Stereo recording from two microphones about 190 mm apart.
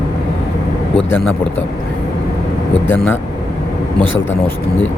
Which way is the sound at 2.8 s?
10° left (ahead or behind).